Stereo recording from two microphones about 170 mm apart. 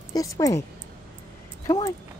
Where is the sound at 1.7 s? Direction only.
20° left (ahead or behind).